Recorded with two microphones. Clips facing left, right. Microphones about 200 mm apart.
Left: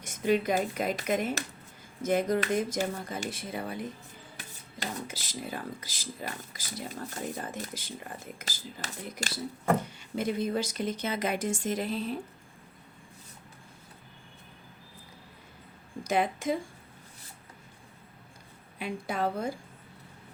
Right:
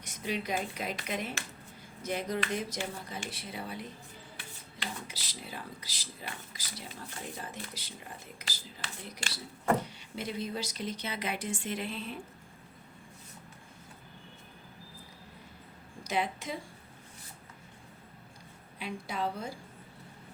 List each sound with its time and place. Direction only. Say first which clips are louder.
0.0 s speech: left 9 dB; 50° left (ahead or behind)
16.0 s speech: left 6 dB; 50° left (ahead or behind)
18.8 s speech: left 4 dB; 50° left (ahead or behind)